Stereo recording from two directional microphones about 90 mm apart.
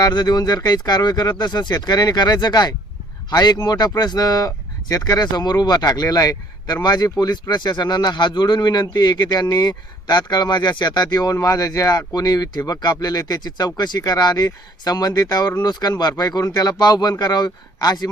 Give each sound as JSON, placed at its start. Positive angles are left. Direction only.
{"t": 0.0, "sound": "speech", "side_deg": 50}